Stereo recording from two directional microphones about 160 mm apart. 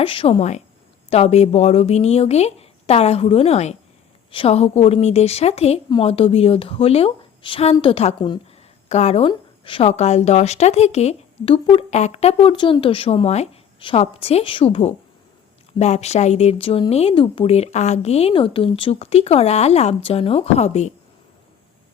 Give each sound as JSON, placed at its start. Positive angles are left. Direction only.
{"t": 0.0, "sound": "a woman's voice", "side_deg": 35}